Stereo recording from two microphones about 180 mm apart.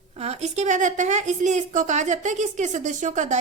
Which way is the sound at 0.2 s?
35° right (ahead or behind).